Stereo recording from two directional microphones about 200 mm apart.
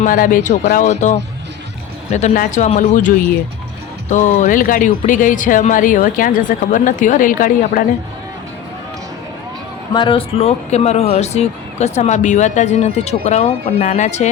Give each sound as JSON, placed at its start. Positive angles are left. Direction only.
{"t": 0.0, "sound": "speech", "side_deg": 45}
{"t": 4.1, "sound": "speech", "side_deg": 40}
{"t": 9.9, "sound": "speech", "side_deg": 25}